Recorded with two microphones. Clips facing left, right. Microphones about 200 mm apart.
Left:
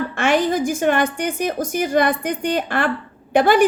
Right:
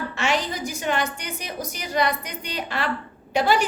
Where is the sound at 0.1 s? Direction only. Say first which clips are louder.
Left 8 dB; 55° left (ahead or behind).